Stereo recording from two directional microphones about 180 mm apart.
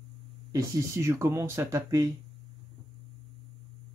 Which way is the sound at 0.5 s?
15° right (ahead or behind).